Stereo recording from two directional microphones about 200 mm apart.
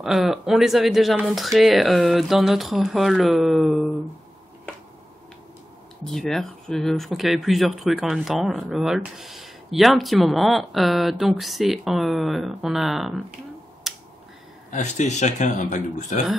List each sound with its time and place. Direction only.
0.0 s speech: centre (ahead or behind)
6.0 s speech: centre (ahead or behind)
13.9 s finger snapping: centre (ahead or behind)
14.7 s speech: 35° left (ahead or behind)